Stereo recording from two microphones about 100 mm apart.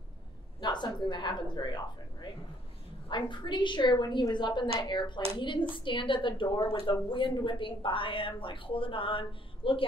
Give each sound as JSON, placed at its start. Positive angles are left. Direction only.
{"t": 0.6, "sound": "a woman's voice", "side_deg": 50}
{"t": 3.1, "sound": "a woman's voice", "side_deg": 50}